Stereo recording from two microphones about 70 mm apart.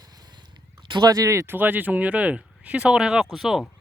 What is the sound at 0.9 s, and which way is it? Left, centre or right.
Speech, right.